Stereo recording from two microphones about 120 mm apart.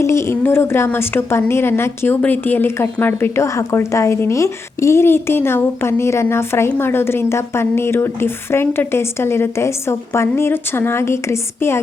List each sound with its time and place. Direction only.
0.0 s speech: 25° left (ahead or behind)